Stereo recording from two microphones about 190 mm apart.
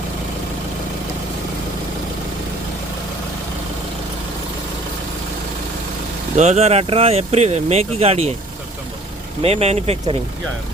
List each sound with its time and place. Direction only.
6.3 s speech: 35° right (ahead or behind)
9.4 s speech: 35° right (ahead or behind)